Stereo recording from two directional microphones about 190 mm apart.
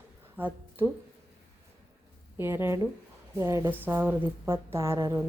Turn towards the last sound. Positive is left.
turn(degrees=-15)  # may be behind; listen again after turning